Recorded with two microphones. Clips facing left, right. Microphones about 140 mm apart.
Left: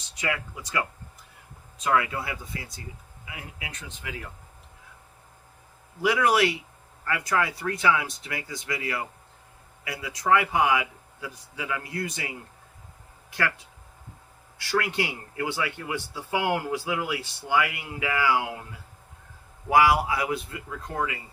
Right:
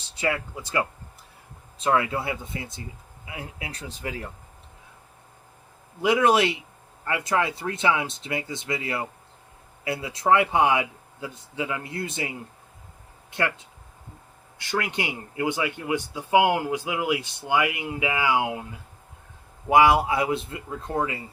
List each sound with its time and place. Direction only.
0.1 s speech: 30° right (ahead or behind)
6.0 s speech: 25° right (ahead or behind)
13.3 s speech: 25° right (ahead or behind)
19.7 s speech: 25° right (ahead or behind)